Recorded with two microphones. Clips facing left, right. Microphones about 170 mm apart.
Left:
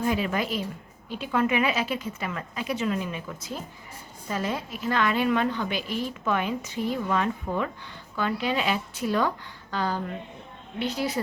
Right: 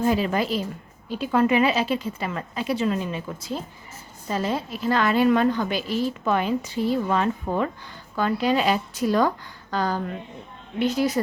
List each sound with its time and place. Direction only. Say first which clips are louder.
0.0 s a woman's voice: right 4 dB; 30° right (ahead or behind)